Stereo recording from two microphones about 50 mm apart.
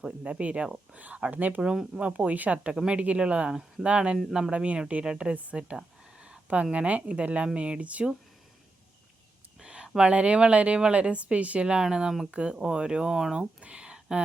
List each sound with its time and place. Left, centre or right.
0.3 s a woman's voice: right
1.6 s speech: centre
2.0 s a woman's voice: right
2.7 s a woman's voice: centre
3.5 s speech: centre
3.8 s a woman's voice: right
9.6 s a sound: centre
10.0 s a woman's voice: right
13.6 s a sound: right